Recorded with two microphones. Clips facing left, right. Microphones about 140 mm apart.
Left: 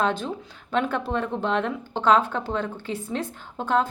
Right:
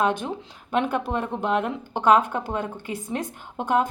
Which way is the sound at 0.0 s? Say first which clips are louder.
Right 1 dB; 15° right (ahead or behind).